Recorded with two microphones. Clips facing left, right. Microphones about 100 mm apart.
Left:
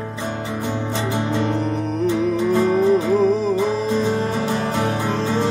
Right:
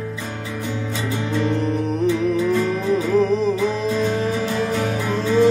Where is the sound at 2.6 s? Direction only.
Centre (ahead or behind).